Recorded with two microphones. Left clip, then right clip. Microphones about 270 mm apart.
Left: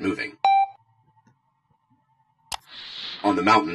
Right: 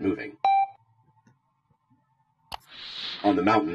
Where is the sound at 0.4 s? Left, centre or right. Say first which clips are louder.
Left 3 dB; centre.